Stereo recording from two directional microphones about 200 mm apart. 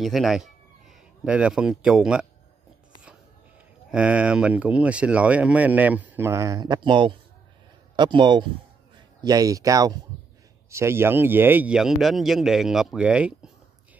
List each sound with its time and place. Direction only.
0.0 s speech: centre (ahead or behind)
3.9 s speech: 5° right (ahead or behind)